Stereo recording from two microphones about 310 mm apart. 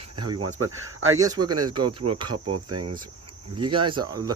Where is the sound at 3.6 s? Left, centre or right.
Centre.